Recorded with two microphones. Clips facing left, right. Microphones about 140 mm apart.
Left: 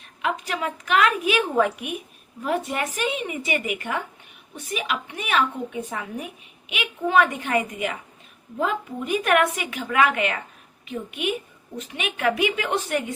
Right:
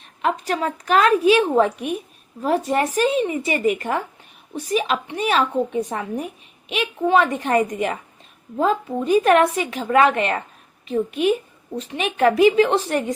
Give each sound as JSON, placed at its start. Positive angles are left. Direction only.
{"t": 0.2, "sound": "a woman's voice", "side_deg": -35}